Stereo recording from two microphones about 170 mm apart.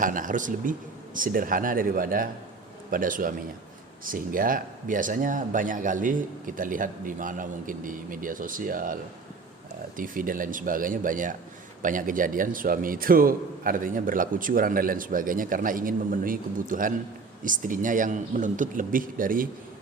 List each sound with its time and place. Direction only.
0.0 s a man's voice: 50° right (ahead or behind)
10.0 s a man's voice: 55° right (ahead or behind)